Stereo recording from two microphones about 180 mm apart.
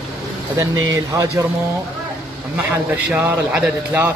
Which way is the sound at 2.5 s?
10° right (ahead or behind).